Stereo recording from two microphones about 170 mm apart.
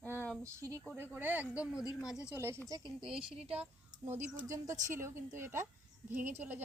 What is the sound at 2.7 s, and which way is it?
Speech, 20° right (ahead or behind).